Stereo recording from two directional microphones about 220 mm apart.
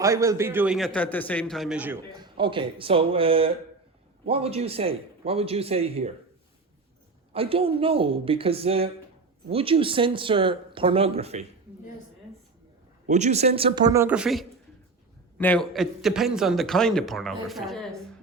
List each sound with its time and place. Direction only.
0.0 s a man's voice: 15° right (ahead or behind)
2.1 s speech: 20° right (ahead or behind)
7.3 s speech: 25° right (ahead or behind)
13.1 s a man's voice: 30° right (ahead or behind); by 17.8 s centre (ahead or behind)